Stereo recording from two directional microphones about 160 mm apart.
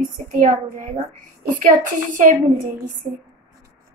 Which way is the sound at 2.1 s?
55° right (ahead or behind).